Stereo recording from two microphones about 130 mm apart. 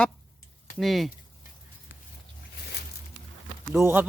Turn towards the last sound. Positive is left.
turn(degrees=-15)  # may be behind; listen again after turning